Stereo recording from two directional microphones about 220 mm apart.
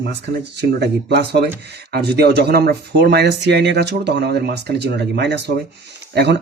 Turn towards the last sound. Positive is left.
turn(degrees=-50)  # may be behind; listen again after turning